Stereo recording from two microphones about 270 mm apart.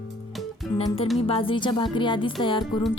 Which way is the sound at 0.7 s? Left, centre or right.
Left.